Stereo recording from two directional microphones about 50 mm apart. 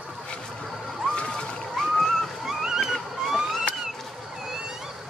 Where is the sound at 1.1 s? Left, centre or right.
Centre.